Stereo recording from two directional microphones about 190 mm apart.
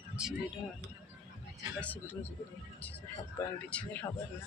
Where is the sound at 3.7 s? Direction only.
5° left (ahead or behind).